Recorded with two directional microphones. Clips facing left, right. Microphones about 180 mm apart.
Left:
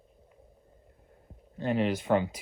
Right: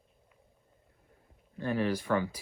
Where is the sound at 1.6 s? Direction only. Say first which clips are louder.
Left 2 dB; 20° left (ahead or behind).